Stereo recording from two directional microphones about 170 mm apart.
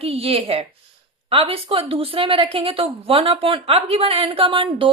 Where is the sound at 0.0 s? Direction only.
35° right (ahead or behind).